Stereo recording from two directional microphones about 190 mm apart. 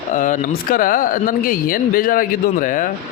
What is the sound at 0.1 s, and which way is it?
Speech, 45° left (ahead or behind).